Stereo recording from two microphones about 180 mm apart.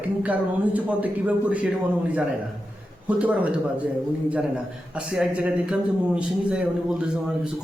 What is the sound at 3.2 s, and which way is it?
A man's voice, 10° right (ahead or behind).